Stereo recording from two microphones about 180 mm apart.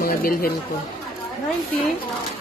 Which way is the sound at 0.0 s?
55° left (ahead or behind).